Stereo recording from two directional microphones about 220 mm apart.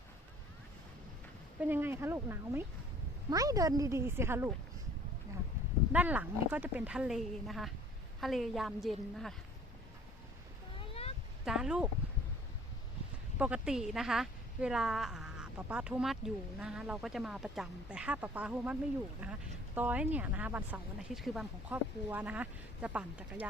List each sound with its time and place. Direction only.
1.6 s speech: 10° right (ahead or behind)
5.9 s a woman's voice: 5° right (ahead or behind)
10.8 s a sound: 25° left (ahead or behind)
11.4 s a woman's voice: 5° right (ahead or behind)
13.4 s a woman's voice: 5° right (ahead or behind)